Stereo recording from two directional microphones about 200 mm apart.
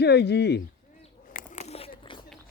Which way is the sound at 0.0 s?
55° left (ahead or behind).